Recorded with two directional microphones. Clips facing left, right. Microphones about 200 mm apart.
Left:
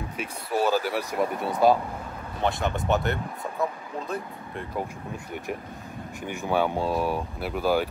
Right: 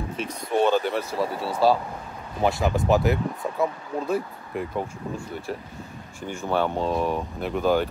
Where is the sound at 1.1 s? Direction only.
20° left (ahead or behind).